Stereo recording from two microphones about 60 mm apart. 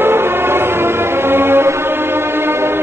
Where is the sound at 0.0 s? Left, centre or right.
Right.